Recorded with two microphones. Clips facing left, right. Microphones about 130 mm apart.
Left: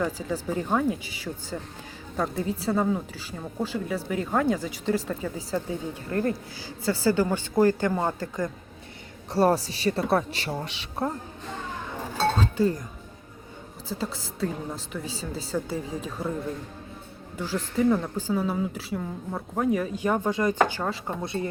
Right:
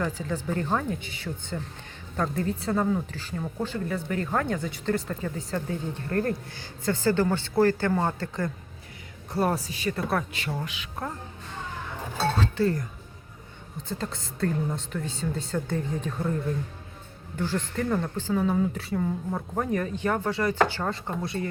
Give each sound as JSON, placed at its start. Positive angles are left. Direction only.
{"t": 0.0, "sound": "a woman's voice", "side_deg": 10}
{"t": 9.3, "sound": "a woman's voice", "side_deg": 30}
{"t": 12.4, "sound": "a woman's voice", "side_deg": 15}
{"t": 13.8, "sound": "a woman's voice", "side_deg": 5}
{"t": 17.3, "sound": "a woman's voice", "side_deg": 10}